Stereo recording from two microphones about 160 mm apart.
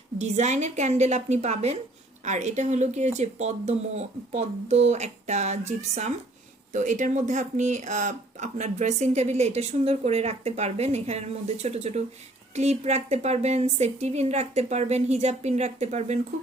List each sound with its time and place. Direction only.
0.2 s speech: 45° right (ahead or behind)